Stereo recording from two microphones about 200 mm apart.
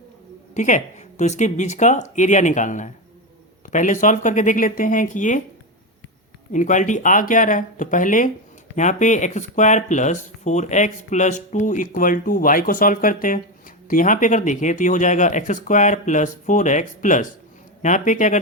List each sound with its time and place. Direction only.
0.5 s speech: 35° left (ahead or behind)
6.5 s speech: 40° left (ahead or behind)